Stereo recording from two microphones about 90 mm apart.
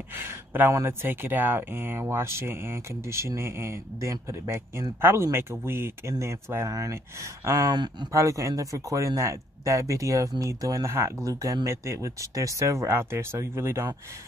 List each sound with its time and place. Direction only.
0.1 s speech: 25° right (ahead or behind)
7.7 s speech: 55° right (ahead or behind)
8.1 s speech: 35° right (ahead or behind)